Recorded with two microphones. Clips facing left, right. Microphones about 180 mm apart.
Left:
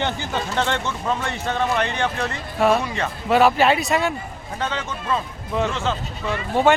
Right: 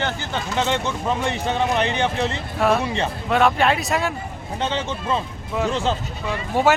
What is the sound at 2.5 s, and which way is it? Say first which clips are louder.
Speech: left 1 dB; centre (ahead or behind).